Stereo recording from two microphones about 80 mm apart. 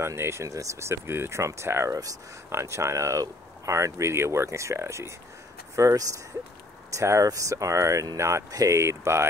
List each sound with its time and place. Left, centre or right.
0.0 s speech: right